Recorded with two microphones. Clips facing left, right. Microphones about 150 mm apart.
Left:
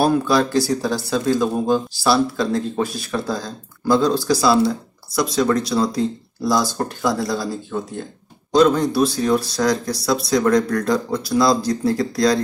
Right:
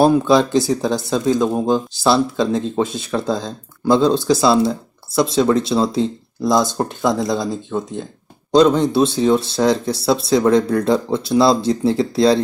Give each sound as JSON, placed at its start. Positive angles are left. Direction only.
{"t": 0.2, "sound": "speech", "side_deg": -20}